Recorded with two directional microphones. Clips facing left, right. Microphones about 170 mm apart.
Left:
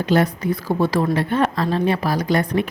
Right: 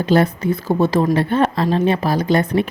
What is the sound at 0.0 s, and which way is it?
A woman's voice, 30° right (ahead or behind).